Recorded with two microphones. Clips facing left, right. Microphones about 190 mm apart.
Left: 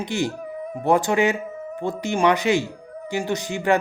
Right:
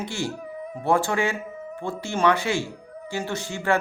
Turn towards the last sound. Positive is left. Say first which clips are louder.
# left 4 dB
turn(degrees=15)  # may be behind; listen again after turning